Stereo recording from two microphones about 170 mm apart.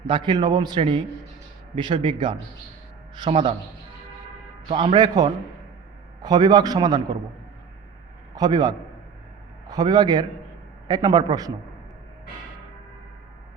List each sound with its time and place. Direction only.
0.1 s a man's voice: 25° right (ahead or behind)
4.7 s a man's voice: 30° right (ahead or behind)
8.4 s a man's voice: 25° right (ahead or behind)